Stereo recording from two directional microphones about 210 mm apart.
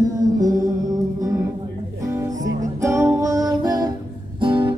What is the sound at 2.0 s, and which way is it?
Music, 15° right (ahead or behind).